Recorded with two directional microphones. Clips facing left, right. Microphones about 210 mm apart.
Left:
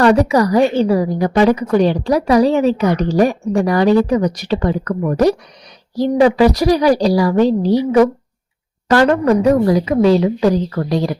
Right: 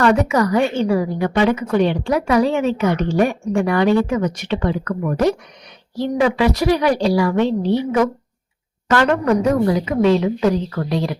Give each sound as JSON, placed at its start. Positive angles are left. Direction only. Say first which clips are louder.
{"t": 0.0, "sound": "a woman's voice", "louder": "left 4 dB", "side_deg": 35}